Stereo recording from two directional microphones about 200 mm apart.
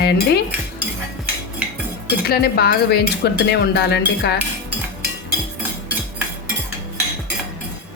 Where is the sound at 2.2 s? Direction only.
50° left (ahead or behind).